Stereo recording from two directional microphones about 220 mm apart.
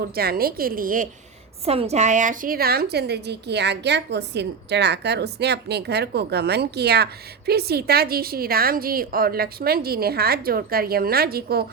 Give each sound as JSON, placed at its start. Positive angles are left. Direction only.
{"t": 0.2, "sound": "a woman's voice", "side_deg": -45}
{"t": 1.6, "sound": "a woman's voice", "side_deg": -30}